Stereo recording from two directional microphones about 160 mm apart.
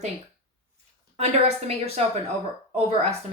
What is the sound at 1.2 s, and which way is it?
Speech, 40° right (ahead or behind).